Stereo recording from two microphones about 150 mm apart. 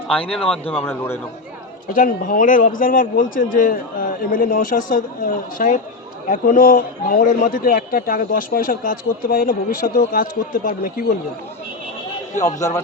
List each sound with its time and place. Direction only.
0.1 s a man's voice: 5° left (ahead or behind)
1.9 s a man's voice: 65° left (ahead or behind)
12.4 s speech: 20° left (ahead or behind)